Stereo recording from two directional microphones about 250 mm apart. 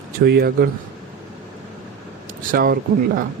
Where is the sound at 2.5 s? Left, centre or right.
Right.